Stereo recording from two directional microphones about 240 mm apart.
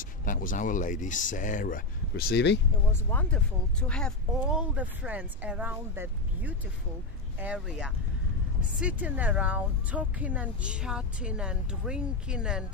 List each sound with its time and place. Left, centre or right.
0.0 s speech: left
2.9 s speech: centre